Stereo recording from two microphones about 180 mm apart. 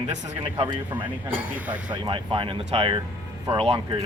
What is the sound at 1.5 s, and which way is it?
Speech, 10° right (ahead or behind).